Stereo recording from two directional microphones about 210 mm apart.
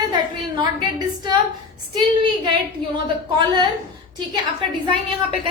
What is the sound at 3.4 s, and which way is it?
Speech, 20° right (ahead or behind).